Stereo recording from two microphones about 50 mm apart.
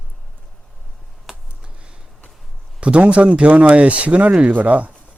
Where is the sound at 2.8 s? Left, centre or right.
Right.